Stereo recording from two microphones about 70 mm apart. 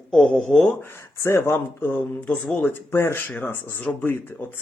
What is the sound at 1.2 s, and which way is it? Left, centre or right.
Speech, left.